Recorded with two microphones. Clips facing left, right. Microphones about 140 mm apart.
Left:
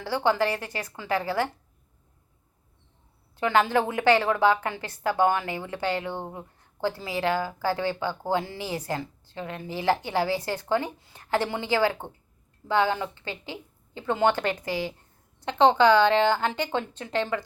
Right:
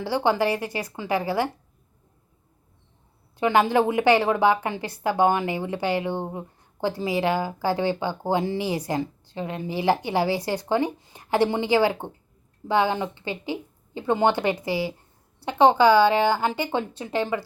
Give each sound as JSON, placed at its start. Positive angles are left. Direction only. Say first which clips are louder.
{"t": 0.0, "sound": "a woman's voice", "louder": "right 2 dB", "side_deg": -15}
{"t": 3.3, "sound": "a woman's voice", "louder": "right 3 dB", "side_deg": -15}